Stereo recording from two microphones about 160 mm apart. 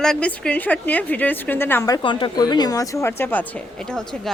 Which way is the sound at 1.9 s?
30° left (ahead or behind).